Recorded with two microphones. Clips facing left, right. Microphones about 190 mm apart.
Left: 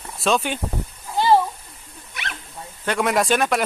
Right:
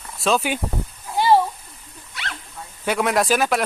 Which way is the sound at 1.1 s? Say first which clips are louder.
Even; 10° right (ahead or behind).